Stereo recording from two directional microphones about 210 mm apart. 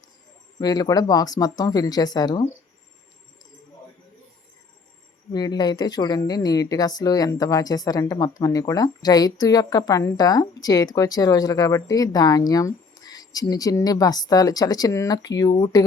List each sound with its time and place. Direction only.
0.6 s speech: 20° left (ahead or behind)
5.3 s speech: 20° left (ahead or behind)